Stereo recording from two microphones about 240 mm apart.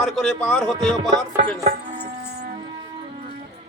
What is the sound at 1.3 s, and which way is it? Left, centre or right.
Chopping, right.